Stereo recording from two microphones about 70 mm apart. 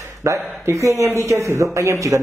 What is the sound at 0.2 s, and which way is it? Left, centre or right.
A man's voice, right.